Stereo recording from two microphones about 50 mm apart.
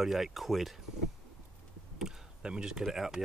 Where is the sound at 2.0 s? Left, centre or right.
Centre.